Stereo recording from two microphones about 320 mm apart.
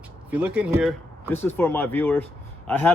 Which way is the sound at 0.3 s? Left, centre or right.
Centre.